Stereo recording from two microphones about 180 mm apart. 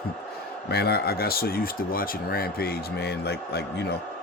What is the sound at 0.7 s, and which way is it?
Speech, 60° left (ahead or behind).